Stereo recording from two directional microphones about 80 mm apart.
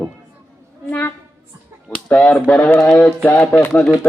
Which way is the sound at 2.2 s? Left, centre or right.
Centre.